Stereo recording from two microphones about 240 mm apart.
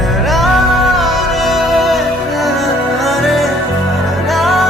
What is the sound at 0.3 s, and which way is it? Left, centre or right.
Music, centre.